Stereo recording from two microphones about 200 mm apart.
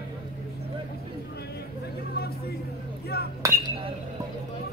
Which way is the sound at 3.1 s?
50° left (ahead or behind).